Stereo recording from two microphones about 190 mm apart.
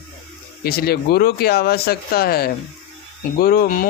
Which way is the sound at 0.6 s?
55° left (ahead or behind).